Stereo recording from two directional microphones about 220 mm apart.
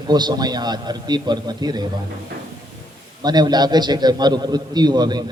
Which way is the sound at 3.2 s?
20° right (ahead or behind).